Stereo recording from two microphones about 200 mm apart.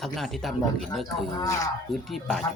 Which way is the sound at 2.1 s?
Centre (ahead or behind).